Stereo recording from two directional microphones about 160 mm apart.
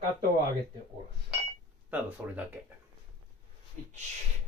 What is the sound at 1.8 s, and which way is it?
Speech, 10° right (ahead or behind).